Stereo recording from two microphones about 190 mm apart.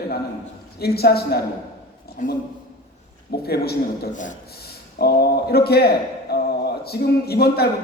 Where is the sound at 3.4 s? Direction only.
55° left (ahead or behind).